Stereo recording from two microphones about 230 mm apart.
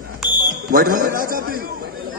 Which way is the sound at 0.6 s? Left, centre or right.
Right.